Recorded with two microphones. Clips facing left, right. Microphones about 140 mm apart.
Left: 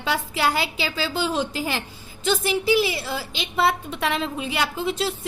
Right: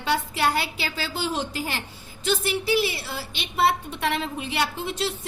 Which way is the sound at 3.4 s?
90° left.